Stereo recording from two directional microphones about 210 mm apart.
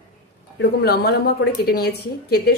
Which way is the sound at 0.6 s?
50° left (ahead or behind).